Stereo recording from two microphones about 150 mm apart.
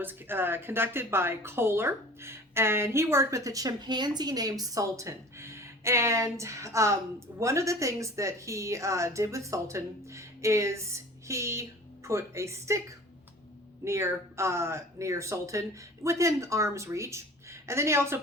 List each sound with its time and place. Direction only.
0.0 s a woman's voice: 15° right (ahead or behind)
13.8 s a woman's voice: 20° right (ahead or behind)